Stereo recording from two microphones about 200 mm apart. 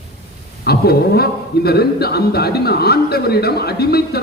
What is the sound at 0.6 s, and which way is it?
Speech, 50° left (ahead or behind).